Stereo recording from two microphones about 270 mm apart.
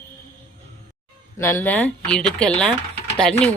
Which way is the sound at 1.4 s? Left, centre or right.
Centre.